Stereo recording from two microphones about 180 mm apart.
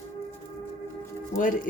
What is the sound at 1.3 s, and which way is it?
Speech, 45° left (ahead or behind).